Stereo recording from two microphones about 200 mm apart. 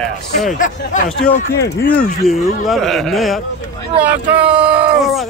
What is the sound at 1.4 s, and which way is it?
Speech, 55° left (ahead or behind).